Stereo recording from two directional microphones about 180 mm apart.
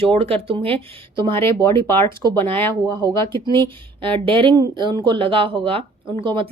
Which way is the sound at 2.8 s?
25° right (ahead or behind).